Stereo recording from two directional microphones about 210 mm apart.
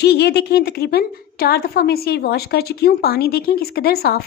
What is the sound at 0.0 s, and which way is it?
Speech, 50° left (ahead or behind).